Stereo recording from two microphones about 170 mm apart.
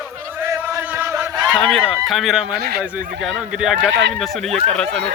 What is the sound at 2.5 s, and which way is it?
Speech, 70° right (ahead or behind).